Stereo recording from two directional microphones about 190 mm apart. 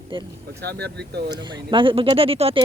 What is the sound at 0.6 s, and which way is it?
Speech, 60° right (ahead or behind).